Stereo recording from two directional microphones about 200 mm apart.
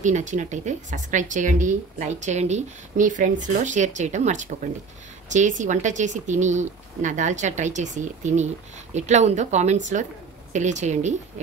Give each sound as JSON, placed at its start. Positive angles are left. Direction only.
{"t": 0.0, "sound": "speech", "side_deg": -40}